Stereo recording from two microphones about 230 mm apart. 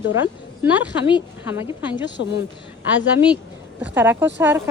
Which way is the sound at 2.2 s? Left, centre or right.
Left.